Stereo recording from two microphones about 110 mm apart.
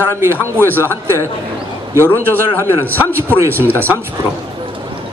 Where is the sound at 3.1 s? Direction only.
20° right (ahead or behind).